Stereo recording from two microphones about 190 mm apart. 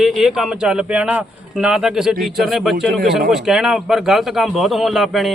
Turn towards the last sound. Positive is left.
turn(degrees=0)  # may be behind; listen again after turning